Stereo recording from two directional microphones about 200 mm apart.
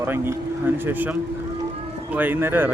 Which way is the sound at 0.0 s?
10° right (ahead or behind).